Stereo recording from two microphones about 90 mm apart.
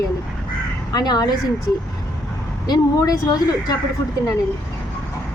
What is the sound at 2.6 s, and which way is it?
A woman's voice, 45° left (ahead or behind).